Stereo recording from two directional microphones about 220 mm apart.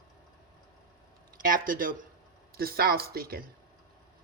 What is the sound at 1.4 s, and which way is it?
Speech, 40° right (ahead or behind).